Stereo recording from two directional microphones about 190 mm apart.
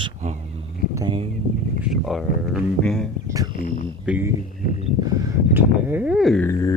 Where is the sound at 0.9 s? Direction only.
25° right (ahead or behind).